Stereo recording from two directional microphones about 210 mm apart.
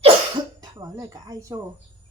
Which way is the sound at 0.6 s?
15° right (ahead or behind).